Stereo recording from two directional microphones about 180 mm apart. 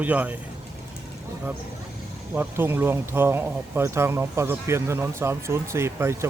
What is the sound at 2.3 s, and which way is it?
Speech, 10° right (ahead or behind).